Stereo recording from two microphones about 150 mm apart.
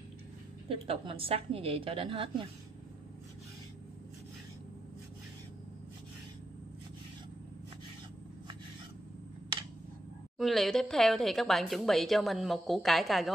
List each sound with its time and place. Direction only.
0.7 s a woman's voice: 40° right (ahead or behind)
10.3 s speech: centre (ahead or behind)